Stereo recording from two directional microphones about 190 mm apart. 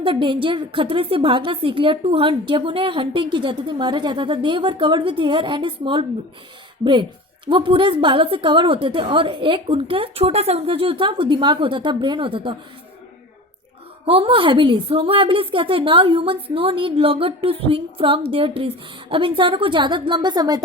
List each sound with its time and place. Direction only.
0.0 s a woman's voice: 25° right (ahead or behind)
7.4 s a woman's voice: 25° right (ahead or behind)
14.0 s a woman's voice: 30° right (ahead or behind)